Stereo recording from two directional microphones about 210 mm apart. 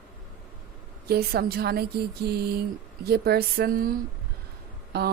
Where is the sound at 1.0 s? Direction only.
50° right (ahead or behind).